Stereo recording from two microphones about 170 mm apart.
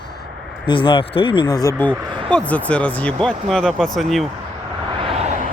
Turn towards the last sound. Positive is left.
turn(degrees=-40)  # may be behind; listen again after turning